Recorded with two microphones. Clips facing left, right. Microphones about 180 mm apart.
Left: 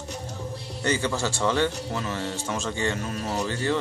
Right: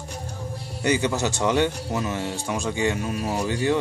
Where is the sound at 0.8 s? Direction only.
15° right (ahead or behind).